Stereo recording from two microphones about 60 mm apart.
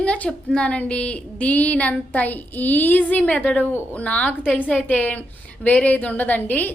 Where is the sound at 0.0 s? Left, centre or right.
Left.